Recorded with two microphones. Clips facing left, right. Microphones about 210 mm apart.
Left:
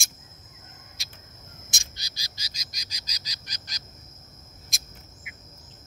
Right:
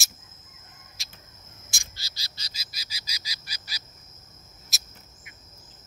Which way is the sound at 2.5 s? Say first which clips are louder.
Left 1 dB; 5° right (ahead or behind).